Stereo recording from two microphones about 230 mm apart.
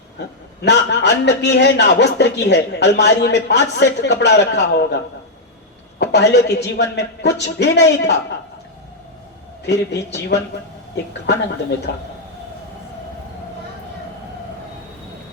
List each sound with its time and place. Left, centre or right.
0.6 s a man's voice: left
6.0 s a man's voice: left
9.6 s a man's voice: left
11.9 s a man's voice: left